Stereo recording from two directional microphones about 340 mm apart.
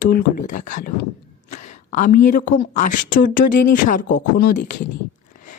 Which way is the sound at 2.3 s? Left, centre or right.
Left.